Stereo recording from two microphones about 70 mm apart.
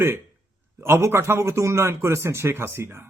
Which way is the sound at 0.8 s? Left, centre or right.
Right.